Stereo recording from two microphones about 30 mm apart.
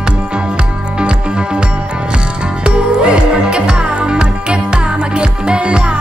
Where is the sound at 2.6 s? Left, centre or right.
Right.